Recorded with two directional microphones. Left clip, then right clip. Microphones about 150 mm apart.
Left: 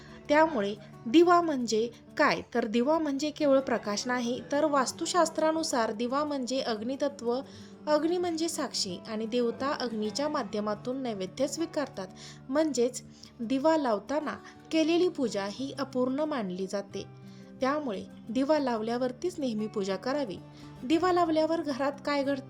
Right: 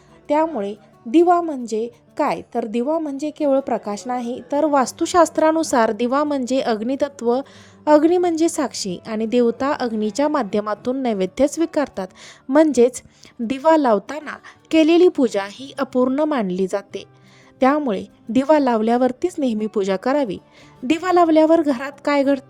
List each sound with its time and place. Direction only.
0.3 s a woman's voice: 25° right (ahead or behind); by 4.7 s 40° right (ahead or behind)
4.7 s a woman's voice: 60° right (ahead or behind)